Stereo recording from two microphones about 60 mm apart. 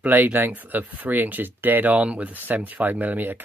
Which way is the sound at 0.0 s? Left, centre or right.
Right.